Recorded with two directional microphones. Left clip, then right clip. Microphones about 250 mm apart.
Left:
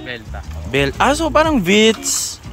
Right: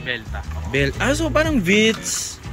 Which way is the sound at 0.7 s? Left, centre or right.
Centre.